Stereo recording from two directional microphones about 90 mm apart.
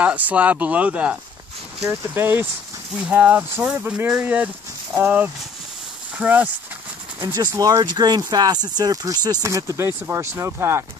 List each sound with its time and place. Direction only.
0.0 s speech: 15° right (ahead or behind)
1.9 s speech: 25° right (ahead or behind)
7.3 s speech: 45° right (ahead or behind)
9.4 s speech: 35° right (ahead or behind)